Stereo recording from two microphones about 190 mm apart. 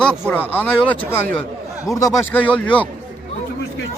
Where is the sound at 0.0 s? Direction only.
5° left (ahead or behind).